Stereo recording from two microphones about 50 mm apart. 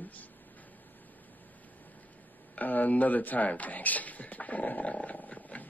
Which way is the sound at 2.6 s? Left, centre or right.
Left.